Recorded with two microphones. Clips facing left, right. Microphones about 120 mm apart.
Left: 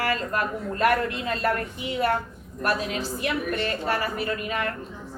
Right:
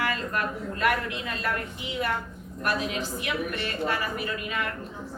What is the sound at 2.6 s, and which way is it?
A woman's voice, 40° left (ahead or behind).